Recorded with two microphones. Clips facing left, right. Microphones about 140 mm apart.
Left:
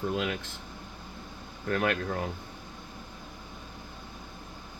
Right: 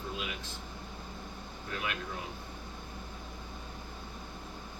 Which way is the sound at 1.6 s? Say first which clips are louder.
Left 10 dB; 65° left (ahead or behind).